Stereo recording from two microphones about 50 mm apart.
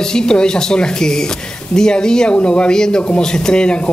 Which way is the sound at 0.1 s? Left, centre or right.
Centre.